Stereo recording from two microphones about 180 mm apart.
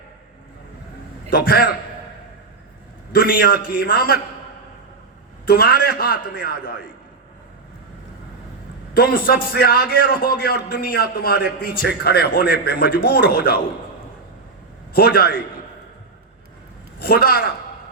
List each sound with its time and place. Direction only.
1.3 s a man's voice: 55° left (ahead or behind)
3.1 s a man's voice: 55° left (ahead or behind)
5.5 s a man's voice: 55° left (ahead or behind)
9.0 s a man's voice: 55° left (ahead or behind)
14.9 s a man's voice: 60° left (ahead or behind)
17.0 s a man's voice: 60° left (ahead or behind)